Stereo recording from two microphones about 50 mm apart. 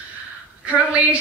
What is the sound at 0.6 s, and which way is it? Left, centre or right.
Speech, right.